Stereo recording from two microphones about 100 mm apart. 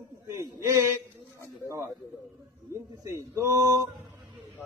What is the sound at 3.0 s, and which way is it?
Speech, 30° right (ahead or behind).